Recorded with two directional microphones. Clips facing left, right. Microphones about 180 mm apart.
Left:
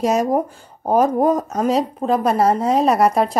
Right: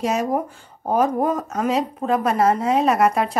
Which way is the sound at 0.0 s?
40° left (ahead or behind).